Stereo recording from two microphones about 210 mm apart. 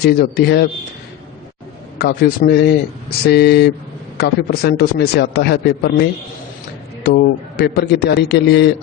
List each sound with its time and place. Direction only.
0.0 s a man's voice: 50° left (ahead or behind)
2.0 s a man's voice: 50° left (ahead or behind)